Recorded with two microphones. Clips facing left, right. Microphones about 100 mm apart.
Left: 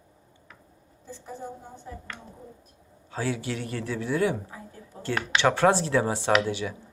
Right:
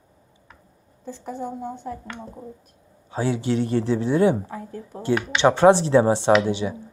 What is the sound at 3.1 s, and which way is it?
Speech, 20° right (ahead or behind).